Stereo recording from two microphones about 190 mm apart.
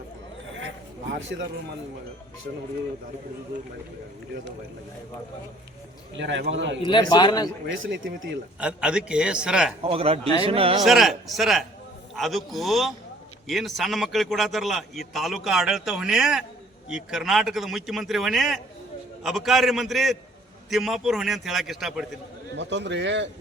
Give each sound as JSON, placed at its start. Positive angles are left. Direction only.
{"t": 6.1, "sound": "a man's voice", "side_deg": -65}
{"t": 6.8, "sound": "a man's voice", "side_deg": 25}
{"t": 7.8, "sound": "speech", "side_deg": -80}
{"t": 8.5, "sound": "a man's voice", "side_deg": -5}
{"t": 9.8, "sound": "speech", "side_deg": -30}
{"t": 10.8, "sound": "a man's voice", "side_deg": 0}
{"t": 22.5, "sound": "a man's voice", "side_deg": -70}